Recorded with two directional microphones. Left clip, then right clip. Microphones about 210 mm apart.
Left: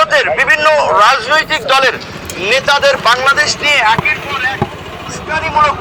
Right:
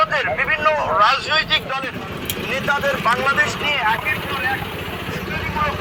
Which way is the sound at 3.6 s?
60° left (ahead or behind).